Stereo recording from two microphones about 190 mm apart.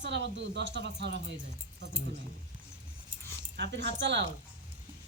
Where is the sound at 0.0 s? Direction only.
65° right (ahead or behind).